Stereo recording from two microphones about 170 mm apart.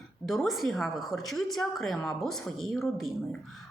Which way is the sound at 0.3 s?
Centre (ahead or behind).